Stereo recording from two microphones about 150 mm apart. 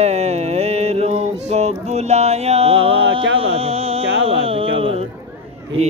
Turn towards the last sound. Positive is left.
turn(degrees=-40)  # may be behind; listen again after turning